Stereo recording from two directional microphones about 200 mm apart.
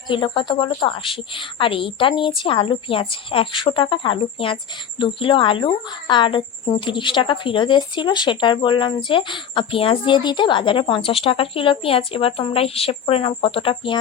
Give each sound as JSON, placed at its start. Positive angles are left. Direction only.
{"t": 0.1, "sound": "a woman's voice", "side_deg": 25}